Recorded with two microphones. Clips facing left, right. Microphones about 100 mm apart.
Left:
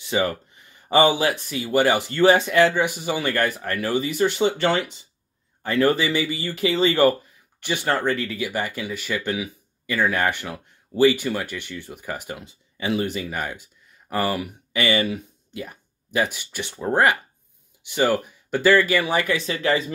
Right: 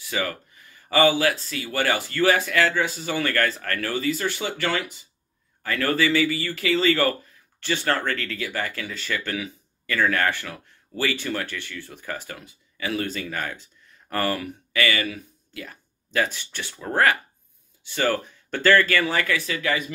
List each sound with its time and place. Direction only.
0.0 s speech: 25° left (ahead or behind)